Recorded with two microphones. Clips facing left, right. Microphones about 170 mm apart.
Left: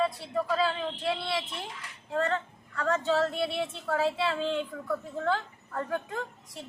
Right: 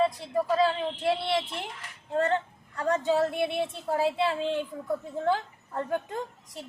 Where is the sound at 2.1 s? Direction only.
25° right (ahead or behind).